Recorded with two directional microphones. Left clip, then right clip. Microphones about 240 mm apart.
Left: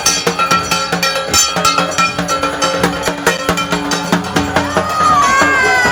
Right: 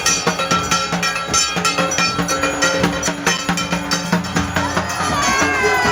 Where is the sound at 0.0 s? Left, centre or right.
Centre.